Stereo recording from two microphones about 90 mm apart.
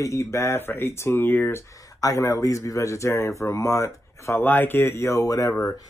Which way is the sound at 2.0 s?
40° left (ahead or behind).